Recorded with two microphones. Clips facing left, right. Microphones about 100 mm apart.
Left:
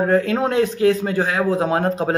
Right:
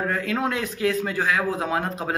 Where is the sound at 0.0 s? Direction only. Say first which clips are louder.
Left 7 dB; 30° left (ahead or behind).